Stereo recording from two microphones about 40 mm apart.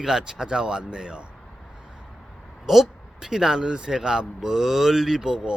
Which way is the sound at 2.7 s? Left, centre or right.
Centre.